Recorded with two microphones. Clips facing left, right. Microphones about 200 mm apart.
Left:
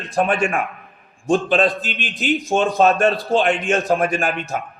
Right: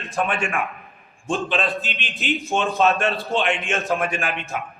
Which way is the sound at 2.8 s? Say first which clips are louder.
Left 4 dB; 35° left (ahead or behind).